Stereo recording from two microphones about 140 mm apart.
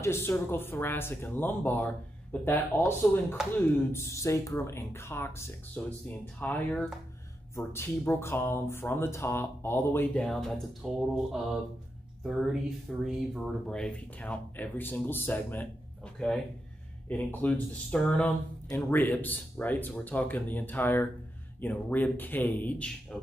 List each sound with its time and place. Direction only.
0.0 s speech: 20° left (ahead or behind)
10.2 s speech: 5° left (ahead or behind)
12.2 s speech: centre (ahead or behind)